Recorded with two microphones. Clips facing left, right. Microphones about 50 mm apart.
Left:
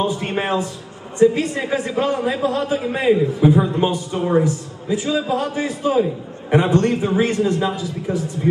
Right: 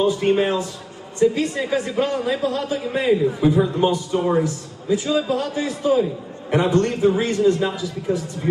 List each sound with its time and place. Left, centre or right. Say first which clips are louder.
0.0 s a man's voice: right 3 dB; left